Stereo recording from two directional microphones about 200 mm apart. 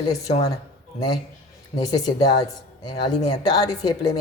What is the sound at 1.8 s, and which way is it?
A woman's voice, 20° left (ahead or behind).